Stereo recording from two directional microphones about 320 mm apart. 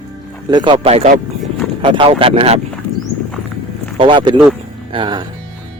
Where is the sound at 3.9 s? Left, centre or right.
Centre.